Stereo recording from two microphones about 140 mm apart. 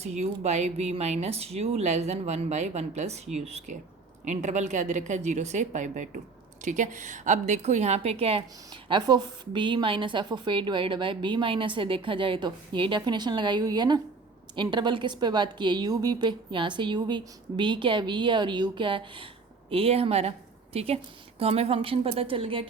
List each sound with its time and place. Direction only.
0.0 s a woman's voice: 55° right (ahead or behind); by 22.7 s 40° right (ahead or behind)